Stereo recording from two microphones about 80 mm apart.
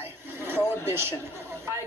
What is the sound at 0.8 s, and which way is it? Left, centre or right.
Speech, right.